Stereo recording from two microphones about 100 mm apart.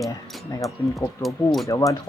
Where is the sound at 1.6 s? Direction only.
35° left (ahead or behind).